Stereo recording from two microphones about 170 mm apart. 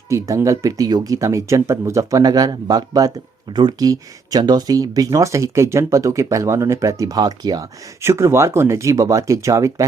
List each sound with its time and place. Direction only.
0.1 s speech: 20° right (ahead or behind)